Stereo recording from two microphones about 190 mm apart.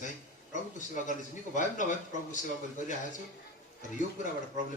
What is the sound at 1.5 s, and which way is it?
Speech, 40° left (ahead or behind).